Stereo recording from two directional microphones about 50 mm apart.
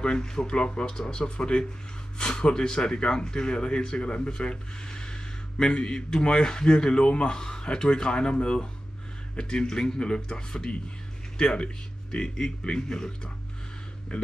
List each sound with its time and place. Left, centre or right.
0.0 s speech: centre